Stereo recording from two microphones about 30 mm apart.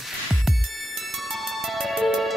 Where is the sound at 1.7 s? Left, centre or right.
Centre.